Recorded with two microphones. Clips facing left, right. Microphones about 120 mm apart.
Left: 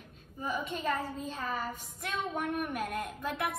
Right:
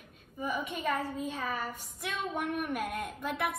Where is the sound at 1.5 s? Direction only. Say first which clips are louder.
Left 1 dB; 50° right (ahead or behind).